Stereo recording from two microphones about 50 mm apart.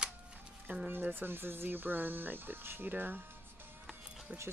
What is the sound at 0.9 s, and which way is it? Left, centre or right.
Speech, right.